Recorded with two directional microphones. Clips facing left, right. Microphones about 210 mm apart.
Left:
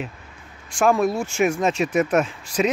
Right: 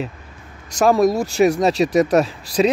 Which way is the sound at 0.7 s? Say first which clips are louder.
Right 4 dB; 40° right (ahead or behind).